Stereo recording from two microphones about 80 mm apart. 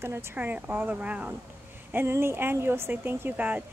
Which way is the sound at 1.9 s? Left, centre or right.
Right.